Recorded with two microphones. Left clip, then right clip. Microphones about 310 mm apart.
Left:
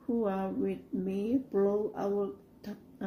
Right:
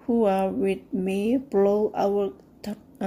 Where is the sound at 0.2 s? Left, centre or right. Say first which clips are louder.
Right 12 dB; right.